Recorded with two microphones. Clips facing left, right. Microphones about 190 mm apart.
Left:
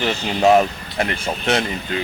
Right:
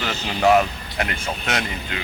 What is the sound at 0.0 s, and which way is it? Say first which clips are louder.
Speech: left 3 dB; 25° left (ahead or behind).